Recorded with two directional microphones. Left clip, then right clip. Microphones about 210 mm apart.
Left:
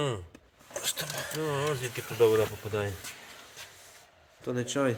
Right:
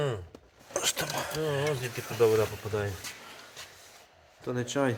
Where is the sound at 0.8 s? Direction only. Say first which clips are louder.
Right 4 dB; 35° right (ahead or behind).